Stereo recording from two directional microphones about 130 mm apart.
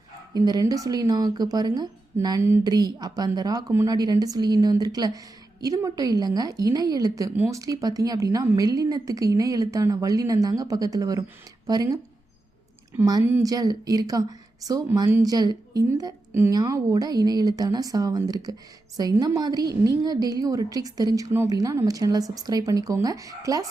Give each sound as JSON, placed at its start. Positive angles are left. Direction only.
{"t": 0.3, "sound": "speech", "side_deg": -30}
{"t": 3.7, "sound": "a woman's voice", "side_deg": -20}
{"t": 3.9, "sound": "a woman's voice", "side_deg": -30}
{"t": 13.4, "sound": "a woman's voice", "side_deg": -30}